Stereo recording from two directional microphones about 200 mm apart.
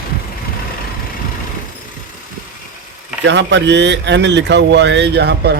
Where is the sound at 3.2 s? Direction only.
65° right (ahead or behind).